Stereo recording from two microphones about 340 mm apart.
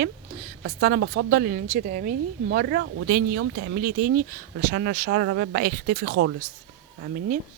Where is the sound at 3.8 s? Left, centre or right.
Right.